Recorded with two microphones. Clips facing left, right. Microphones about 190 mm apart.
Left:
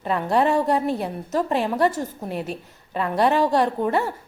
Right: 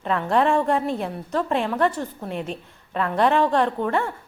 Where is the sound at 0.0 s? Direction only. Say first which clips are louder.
Even; 5° left (ahead or behind).